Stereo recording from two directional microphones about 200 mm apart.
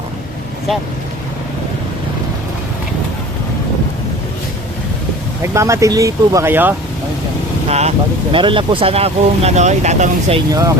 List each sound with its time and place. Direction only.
5.4 s speech: 15° right (ahead or behind)
7.7 s speech: 30° right (ahead or behind)
10.5 s speech: 15° right (ahead or behind)